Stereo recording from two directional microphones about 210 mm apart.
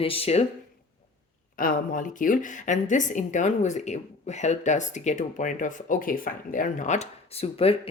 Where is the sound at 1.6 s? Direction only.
40° left (ahead or behind).